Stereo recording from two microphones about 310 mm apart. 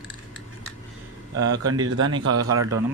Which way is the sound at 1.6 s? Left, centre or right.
Right.